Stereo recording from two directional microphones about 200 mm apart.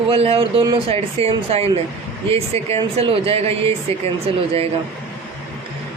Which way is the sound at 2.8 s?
25° right (ahead or behind).